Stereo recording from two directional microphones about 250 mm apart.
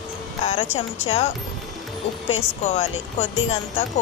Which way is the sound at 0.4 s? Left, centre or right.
Left.